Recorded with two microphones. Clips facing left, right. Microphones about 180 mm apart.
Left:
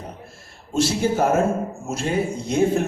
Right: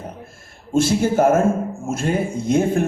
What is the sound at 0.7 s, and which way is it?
Speech, 50° right (ahead or behind).